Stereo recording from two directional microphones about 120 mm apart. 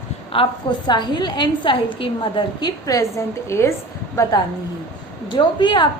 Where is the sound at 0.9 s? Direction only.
35° left (ahead or behind).